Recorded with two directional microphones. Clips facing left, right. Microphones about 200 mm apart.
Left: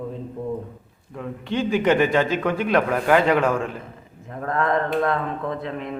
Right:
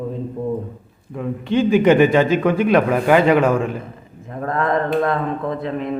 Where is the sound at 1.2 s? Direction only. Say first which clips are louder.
Right 7 dB; 10° right (ahead or behind).